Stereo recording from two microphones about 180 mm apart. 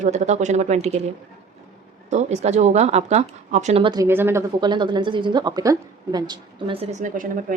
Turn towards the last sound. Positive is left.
turn(degrees=-50)  # may be behind; listen again after turning